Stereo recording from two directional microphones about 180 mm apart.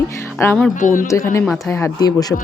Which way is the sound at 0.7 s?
45° left (ahead or behind).